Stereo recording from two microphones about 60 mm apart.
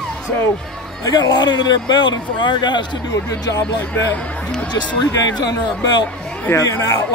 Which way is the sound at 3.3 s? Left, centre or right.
Left.